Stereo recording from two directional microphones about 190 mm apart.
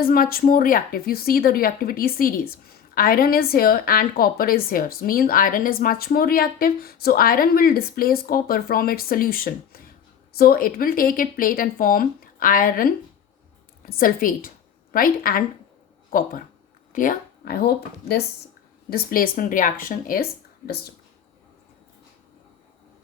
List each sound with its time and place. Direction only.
0.0 s a woman's voice: 50° left (ahead or behind)
13.9 s a woman's voice: 50° left (ahead or behind)